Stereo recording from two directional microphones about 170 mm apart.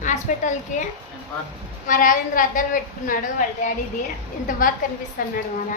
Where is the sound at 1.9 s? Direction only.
50° left (ahead or behind).